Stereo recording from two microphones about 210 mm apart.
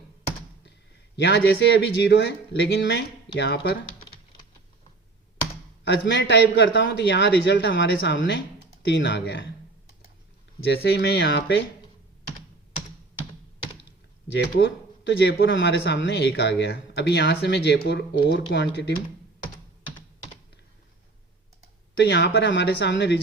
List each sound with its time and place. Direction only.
1.1 s speech: 55° left (ahead or behind)
6.1 s speech: 60° left (ahead or behind)
10.7 s speech: 50° left (ahead or behind)
14.3 s speech: 55° left (ahead or behind)
21.9 s speech: 50° left (ahead or behind)